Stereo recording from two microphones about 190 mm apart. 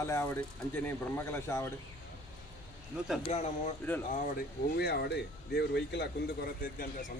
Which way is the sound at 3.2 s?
35° left (ahead or behind).